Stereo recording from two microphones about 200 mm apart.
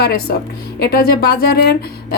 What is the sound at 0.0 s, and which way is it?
Speech, 50° left (ahead or behind).